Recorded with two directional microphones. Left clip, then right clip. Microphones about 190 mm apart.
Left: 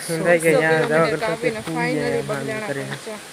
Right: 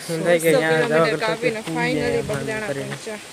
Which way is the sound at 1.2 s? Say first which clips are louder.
Right 1 dB; 20° right (ahead or behind).